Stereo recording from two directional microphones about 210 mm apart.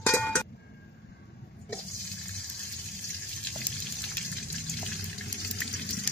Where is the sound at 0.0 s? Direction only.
10° left (ahead or behind).